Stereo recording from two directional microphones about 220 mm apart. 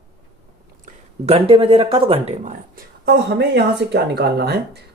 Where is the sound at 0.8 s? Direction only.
25° right (ahead or behind); by 4.8 s 45° right (ahead or behind).